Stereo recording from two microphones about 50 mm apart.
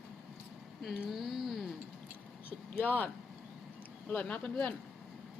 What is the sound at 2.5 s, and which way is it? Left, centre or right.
Speech, left.